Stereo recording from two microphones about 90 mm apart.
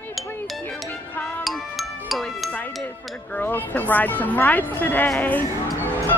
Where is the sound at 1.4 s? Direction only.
Centre (ahead or behind).